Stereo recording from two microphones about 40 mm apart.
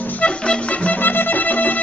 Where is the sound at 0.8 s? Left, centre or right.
Left.